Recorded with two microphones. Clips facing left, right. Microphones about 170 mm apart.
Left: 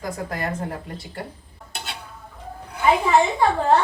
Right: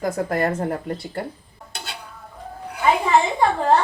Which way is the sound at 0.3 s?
50° right (ahead or behind).